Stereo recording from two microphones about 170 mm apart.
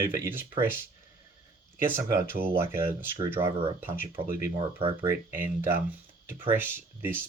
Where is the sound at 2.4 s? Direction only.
15° right (ahead or behind).